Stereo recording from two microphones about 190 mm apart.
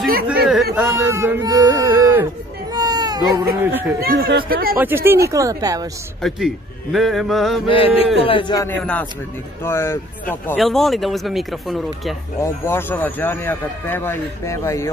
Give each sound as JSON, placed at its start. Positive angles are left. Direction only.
{"t": 0.3, "sound": "a sound", "side_deg": 0}
{"t": 0.7, "sound": "speech", "side_deg": -15}
{"t": 2.7, "sound": "baby cry", "side_deg": -20}
{"t": 3.6, "sound": "speech", "side_deg": -10}
{"t": 4.0, "sound": "speech", "side_deg": -55}
{"t": 4.7, "sound": "speech", "side_deg": -10}
{"t": 6.2, "sound": "speech", "side_deg": 0}
{"t": 7.6, "sound": "a sound", "side_deg": 30}
{"t": 9.7, "sound": "speech", "side_deg": 10}
{"t": 12.4, "sound": "speech", "side_deg": 10}